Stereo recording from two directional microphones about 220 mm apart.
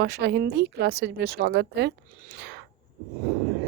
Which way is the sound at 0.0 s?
50° right (ahead or behind).